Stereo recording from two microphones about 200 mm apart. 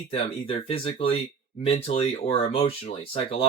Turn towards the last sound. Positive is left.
turn(degrees=30)  # may be behind; listen again after turning